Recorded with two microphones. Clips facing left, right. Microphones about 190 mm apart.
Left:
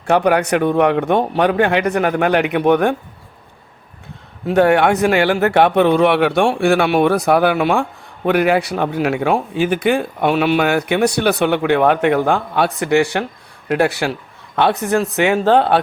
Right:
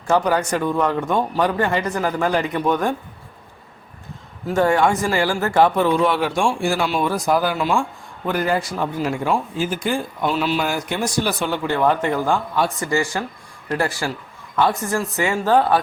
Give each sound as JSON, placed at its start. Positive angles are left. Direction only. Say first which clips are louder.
{"t": 0.1, "sound": "speech", "louder": "left 4 dB", "side_deg": 65}
{"t": 4.4, "sound": "a man's voice", "louder": "left 4 dB", "side_deg": 70}